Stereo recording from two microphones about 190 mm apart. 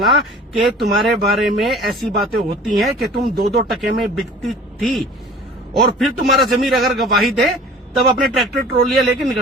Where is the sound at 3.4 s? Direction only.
55° right (ahead or behind).